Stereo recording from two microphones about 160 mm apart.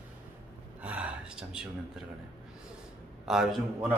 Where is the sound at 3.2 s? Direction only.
Centre (ahead or behind).